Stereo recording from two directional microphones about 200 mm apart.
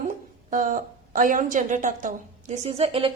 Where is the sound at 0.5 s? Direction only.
40° right (ahead or behind).